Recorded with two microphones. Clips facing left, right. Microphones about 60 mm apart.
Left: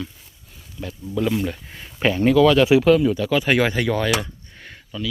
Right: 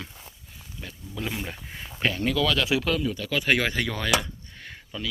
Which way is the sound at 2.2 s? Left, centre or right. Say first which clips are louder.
Left 12 dB; left.